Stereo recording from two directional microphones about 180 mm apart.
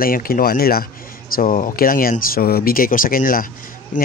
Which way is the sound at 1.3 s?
45° left (ahead or behind).